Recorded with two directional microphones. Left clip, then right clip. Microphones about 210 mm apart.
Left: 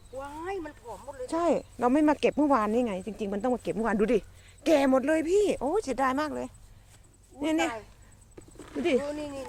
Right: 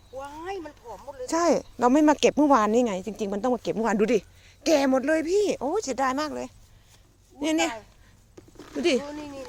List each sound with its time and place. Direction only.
0.2 s speech: 45° right (ahead or behind); by 7.8 s 30° right (ahead or behind)
8.4 s a sound: 30° right (ahead or behind)
9.0 s speech: centre (ahead or behind)